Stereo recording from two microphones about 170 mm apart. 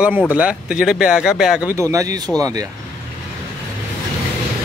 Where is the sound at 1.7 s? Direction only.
20° right (ahead or behind).